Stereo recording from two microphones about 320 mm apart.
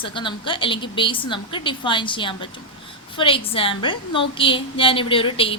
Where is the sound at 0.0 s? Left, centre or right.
Centre.